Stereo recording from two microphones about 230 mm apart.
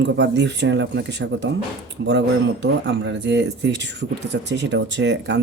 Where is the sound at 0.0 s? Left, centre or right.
Right.